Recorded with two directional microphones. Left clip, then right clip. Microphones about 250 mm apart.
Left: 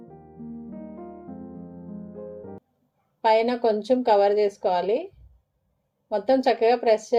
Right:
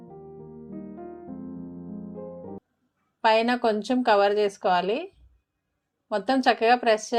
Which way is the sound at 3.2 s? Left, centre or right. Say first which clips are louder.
Left 1 dB; right.